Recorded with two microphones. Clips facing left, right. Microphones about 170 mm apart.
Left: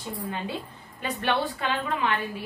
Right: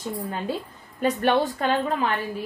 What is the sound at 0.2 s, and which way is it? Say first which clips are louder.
A woman's voice: right 3 dB; 40° right (ahead or behind).